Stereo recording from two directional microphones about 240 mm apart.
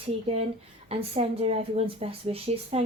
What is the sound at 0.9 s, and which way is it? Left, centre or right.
Speech, right.